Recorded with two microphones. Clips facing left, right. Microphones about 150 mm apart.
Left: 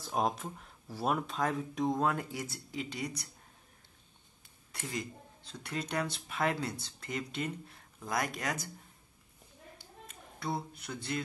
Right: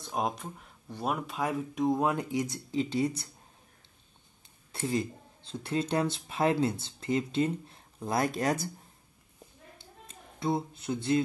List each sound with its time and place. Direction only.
0.0 s speech: centre (ahead or behind)
2.0 s speech: 15° right (ahead or behind)
4.7 s speech: 30° right (ahead or behind)
9.8 s a sound: 25° right (ahead or behind)